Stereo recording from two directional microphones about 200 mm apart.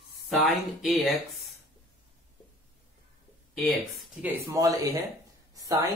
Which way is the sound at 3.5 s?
Centre (ahead or behind).